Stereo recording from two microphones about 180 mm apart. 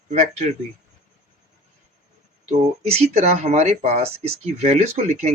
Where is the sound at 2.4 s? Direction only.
35° right (ahead or behind).